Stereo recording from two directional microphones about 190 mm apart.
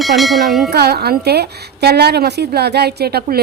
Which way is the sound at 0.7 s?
55° right (ahead or behind).